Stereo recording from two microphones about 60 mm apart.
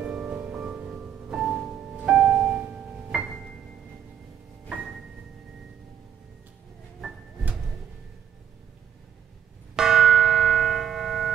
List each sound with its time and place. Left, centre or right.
0.0 s music: centre
9.8 s church bell: centre